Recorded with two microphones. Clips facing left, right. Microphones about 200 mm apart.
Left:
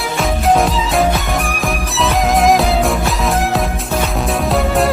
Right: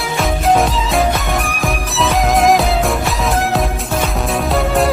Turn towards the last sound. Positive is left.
turn(degrees=0)  # may be behind; listen again after turning